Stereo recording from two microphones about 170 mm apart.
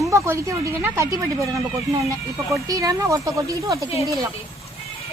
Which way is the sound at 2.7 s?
20° right (ahead or behind).